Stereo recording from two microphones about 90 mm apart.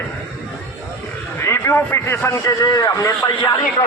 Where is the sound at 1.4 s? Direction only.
30° left (ahead or behind).